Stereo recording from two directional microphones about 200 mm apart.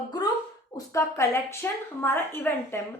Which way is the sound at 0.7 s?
15° left (ahead or behind).